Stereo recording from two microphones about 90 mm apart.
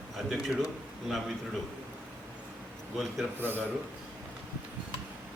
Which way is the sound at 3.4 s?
25° right (ahead or behind).